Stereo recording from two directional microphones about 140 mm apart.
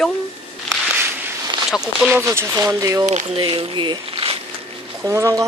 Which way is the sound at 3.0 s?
55° right (ahead or behind).